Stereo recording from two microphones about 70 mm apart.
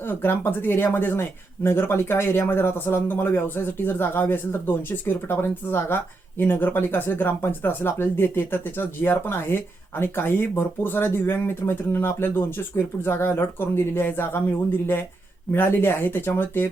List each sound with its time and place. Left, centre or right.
0.0 s speech: left